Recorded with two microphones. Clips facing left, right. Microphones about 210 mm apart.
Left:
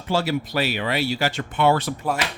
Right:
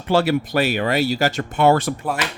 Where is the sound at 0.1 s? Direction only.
60° right (ahead or behind); by 1.9 s 45° right (ahead or behind).